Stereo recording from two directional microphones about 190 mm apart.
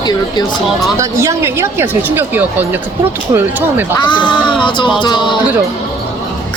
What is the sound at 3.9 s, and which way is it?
Speech, 25° left (ahead or behind).